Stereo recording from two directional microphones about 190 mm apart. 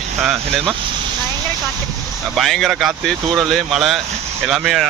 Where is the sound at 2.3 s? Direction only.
Centre (ahead or behind).